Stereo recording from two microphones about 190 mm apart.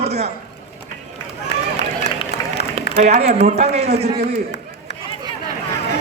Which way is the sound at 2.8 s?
35° right (ahead or behind).